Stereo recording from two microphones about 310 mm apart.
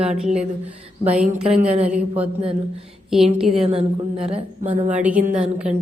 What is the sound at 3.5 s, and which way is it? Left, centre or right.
A woman's voice, centre.